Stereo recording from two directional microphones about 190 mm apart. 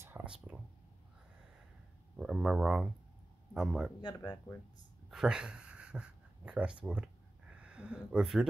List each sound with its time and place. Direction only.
0.0 s a sound: 10° right (ahead or behind)
2.1 s speech: 5° right (ahead or behind)
4.0 s speech: 20° left (ahead or behind)
5.1 s speech: 5° right (ahead or behind)